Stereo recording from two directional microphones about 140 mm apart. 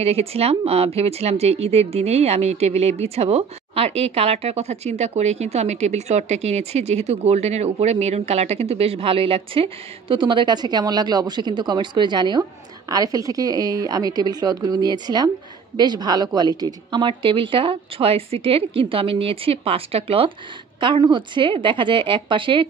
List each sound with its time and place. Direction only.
0.0 s a woman's voice: 45° right (ahead or behind)